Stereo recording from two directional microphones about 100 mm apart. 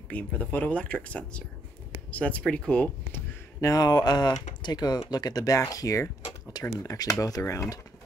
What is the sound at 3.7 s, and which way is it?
Speech, 40° left (ahead or behind).